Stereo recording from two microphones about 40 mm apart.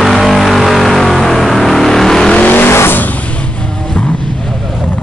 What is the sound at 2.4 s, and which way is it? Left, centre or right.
Vehicle, left.